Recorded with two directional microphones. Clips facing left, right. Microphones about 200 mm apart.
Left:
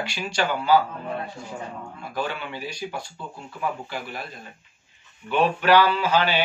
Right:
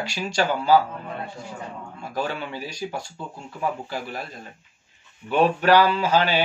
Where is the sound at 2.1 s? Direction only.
40° right (ahead or behind).